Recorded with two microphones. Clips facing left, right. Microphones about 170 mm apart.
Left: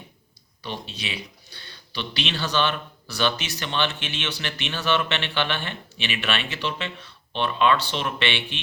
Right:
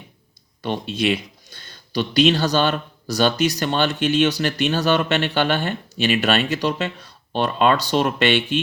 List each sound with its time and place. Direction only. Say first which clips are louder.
0.6 s speech: right 11 dB; 55° right (ahead or behind)